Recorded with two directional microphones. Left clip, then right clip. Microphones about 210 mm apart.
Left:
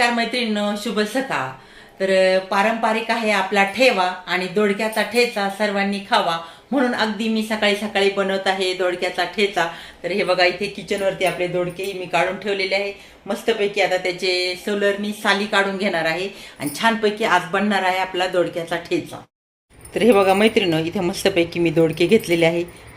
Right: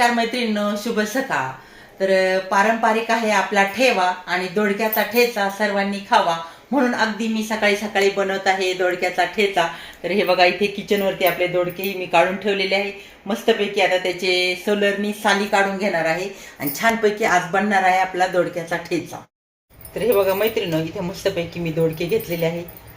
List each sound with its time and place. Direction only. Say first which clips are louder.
0.0 s speech: right 1 dB; centre (ahead or behind); by 15.1 s 15° right (ahead or behind)
15.2 s speech: right 1 dB; centre (ahead or behind)
19.9 s a woman's voice: left 3 dB; 55° left (ahead or behind)